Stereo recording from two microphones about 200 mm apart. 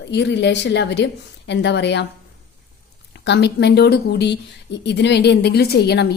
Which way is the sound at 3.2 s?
60° left (ahead or behind).